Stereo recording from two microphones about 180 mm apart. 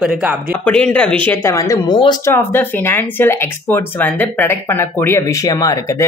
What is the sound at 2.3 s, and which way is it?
Speech, 10° left (ahead or behind).